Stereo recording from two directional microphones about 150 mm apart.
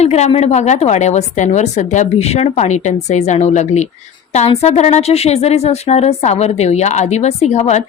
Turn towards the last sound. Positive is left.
turn(degrees=50)  # may be behind; listen again after turning